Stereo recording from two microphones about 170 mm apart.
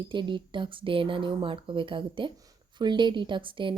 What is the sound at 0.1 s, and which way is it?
A woman's voice, 30° right (ahead or behind).